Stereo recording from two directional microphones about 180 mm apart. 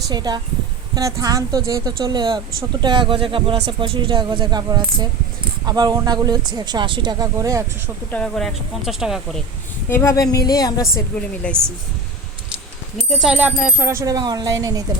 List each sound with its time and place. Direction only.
0.1 s speech: 20° right (ahead or behind)
8.1 s speech: 5° left (ahead or behind)
9.9 s a woman's voice: 15° left (ahead or behind)
11.4 s speech: 5° left (ahead or behind)
13.2 s speech: 5° right (ahead or behind)